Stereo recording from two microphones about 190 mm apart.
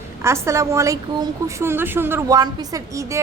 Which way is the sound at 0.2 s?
15° right (ahead or behind).